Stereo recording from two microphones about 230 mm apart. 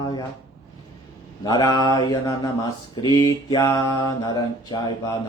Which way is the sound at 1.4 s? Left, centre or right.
Centre.